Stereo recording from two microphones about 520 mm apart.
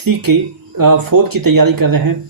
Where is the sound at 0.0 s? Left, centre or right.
Right.